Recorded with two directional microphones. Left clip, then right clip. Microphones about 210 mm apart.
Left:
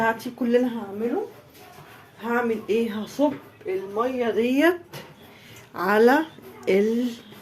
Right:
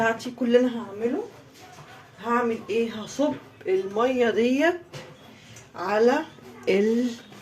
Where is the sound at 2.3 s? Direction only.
40° left (ahead or behind).